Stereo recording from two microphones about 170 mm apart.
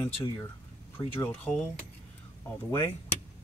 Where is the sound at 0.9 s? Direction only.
10° left (ahead or behind).